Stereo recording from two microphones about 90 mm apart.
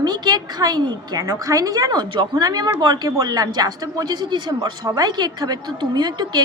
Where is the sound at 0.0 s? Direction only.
50° right (ahead or behind).